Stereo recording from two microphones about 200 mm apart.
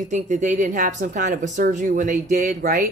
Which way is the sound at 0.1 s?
40° right (ahead or behind).